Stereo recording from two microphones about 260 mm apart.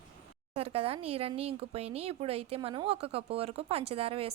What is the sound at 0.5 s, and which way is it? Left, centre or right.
Speech, right.